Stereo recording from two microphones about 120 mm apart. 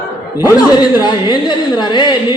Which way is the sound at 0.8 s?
35° left (ahead or behind).